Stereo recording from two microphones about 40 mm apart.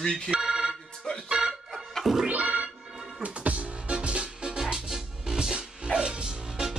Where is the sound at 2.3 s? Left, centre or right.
Right.